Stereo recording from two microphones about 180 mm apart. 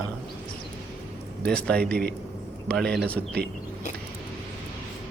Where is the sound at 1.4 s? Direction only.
5° left (ahead or behind).